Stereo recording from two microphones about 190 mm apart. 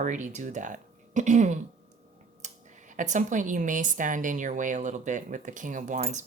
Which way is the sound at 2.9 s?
40° right (ahead or behind).